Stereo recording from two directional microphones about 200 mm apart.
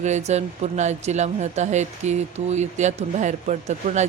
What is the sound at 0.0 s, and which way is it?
Speech, 35° right (ahead or behind).